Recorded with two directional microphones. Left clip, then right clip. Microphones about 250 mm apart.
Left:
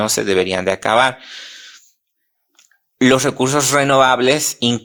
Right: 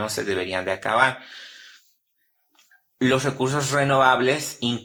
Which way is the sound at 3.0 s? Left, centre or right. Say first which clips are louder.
Left 8 dB; left.